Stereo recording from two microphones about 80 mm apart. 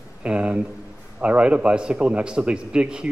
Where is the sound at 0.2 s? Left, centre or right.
Centre.